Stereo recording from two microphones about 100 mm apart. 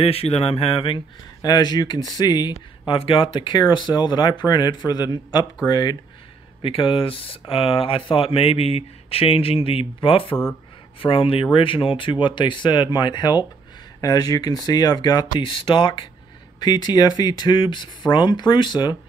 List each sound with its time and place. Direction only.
0.0 s speech: 80° left; by 1.0 s 60° left (ahead or behind)
1.4 s speech: 40° left (ahead or behind)
2.9 s speech: 65° left (ahead or behind); by 5.9 s 45° left (ahead or behind)
6.6 s speech: 65° left (ahead or behind); by 15.4 s 40° left (ahead or behind)
15.4 s speech: 60° left (ahead or behind)
16.5 s speech: 45° left (ahead or behind)